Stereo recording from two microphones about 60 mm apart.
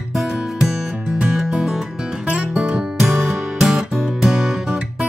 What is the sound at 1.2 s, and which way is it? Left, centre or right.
Music, centre.